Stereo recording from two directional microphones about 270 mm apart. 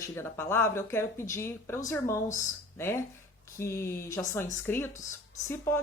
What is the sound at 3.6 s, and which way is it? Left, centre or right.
Speech, centre.